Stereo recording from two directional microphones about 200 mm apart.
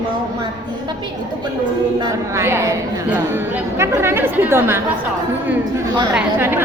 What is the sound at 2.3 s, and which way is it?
A woman's voice, 15° right (ahead or behind).